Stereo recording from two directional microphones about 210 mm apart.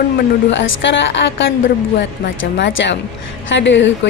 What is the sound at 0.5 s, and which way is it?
A woman's voice, 60° left (ahead or behind).